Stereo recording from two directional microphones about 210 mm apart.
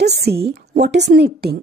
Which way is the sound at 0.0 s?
50° right (ahead or behind).